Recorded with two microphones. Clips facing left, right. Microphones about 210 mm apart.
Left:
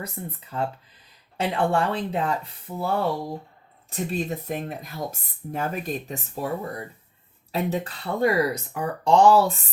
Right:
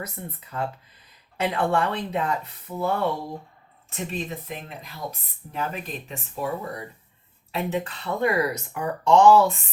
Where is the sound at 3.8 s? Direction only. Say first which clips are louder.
Left 4 dB; 40° left (ahead or behind).